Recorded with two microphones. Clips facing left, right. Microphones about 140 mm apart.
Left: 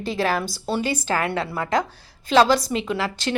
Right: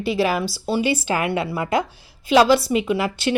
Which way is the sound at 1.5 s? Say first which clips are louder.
Right 1 dB; 20° right (ahead or behind).